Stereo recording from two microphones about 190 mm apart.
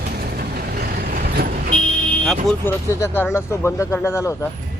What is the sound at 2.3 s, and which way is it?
Speech, centre (ahead or behind).